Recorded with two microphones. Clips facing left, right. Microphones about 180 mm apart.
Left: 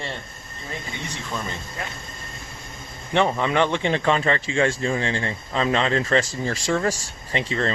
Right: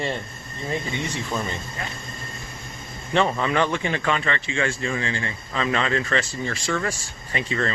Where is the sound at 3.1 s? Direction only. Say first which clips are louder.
Left 1 dB; 15° left (ahead or behind).